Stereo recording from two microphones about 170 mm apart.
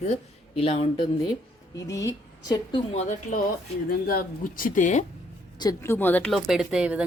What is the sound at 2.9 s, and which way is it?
Speech, 40° left (ahead or behind).